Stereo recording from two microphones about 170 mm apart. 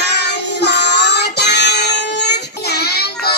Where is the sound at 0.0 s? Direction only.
85° left.